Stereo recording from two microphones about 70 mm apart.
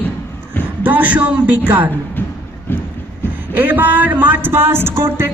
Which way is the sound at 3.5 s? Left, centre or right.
Right.